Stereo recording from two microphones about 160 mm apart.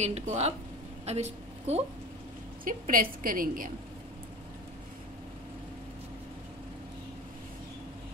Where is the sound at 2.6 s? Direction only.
60° right (ahead or behind).